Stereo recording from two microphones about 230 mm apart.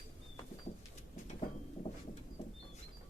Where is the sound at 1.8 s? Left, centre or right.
Left.